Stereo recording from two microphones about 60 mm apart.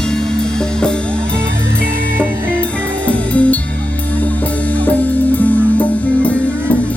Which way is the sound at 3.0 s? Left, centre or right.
Left.